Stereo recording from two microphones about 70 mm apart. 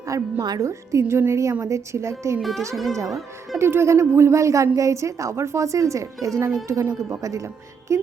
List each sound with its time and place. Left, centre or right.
0.1 s speech: right
0.6 s a woman's voice: right
2.4 s speech: centre
3.6 s a woman's voice: right